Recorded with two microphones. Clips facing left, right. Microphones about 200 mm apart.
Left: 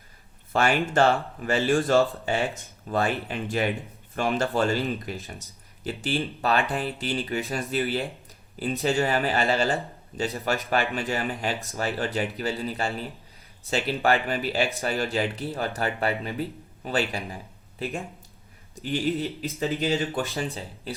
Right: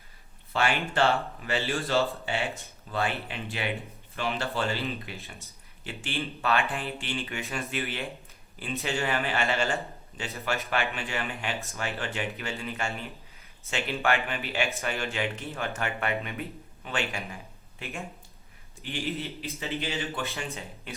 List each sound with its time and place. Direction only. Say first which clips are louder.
0.5 s speech: left 5 dB; 45° left (ahead or behind)